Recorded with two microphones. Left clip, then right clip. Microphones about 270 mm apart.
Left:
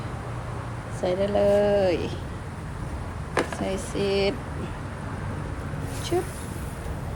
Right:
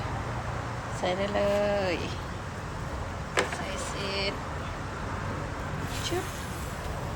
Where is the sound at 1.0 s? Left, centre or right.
Centre.